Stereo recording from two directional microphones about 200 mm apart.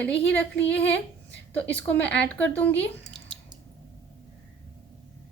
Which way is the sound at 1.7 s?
5° left (ahead or behind).